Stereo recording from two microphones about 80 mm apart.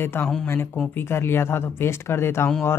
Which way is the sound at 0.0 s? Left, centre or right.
Left.